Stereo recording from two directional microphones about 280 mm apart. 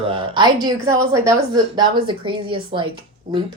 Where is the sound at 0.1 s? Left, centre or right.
Centre.